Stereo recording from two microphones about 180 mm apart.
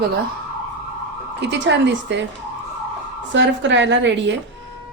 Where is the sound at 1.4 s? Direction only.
75° right (ahead or behind).